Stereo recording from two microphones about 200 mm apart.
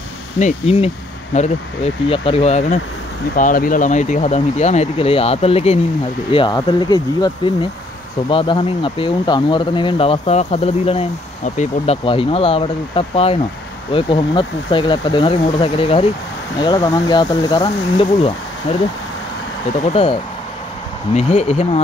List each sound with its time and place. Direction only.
0.4 s speech: 35° left (ahead or behind)
19.8 s speech: 30° left (ahead or behind)